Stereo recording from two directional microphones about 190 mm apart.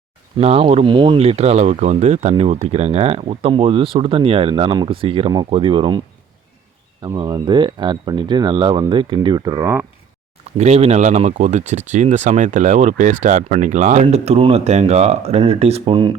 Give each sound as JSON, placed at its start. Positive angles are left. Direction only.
{"t": 0.3, "sound": "speech", "side_deg": -30}
{"t": 7.0, "sound": "speech", "side_deg": -20}
{"t": 10.6, "sound": "speech", "side_deg": -35}